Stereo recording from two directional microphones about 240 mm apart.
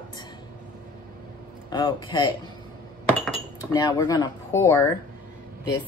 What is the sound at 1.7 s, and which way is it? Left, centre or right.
Speech, centre.